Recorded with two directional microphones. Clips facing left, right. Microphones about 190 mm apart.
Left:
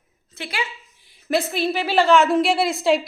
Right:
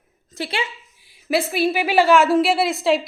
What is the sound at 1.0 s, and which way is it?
A woman's voice, 5° right (ahead or behind).